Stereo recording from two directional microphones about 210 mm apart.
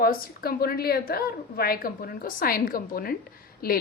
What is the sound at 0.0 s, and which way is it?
Speech, 45° left (ahead or behind).